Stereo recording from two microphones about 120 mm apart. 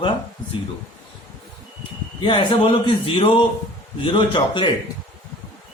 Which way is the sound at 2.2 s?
45° left (ahead or behind).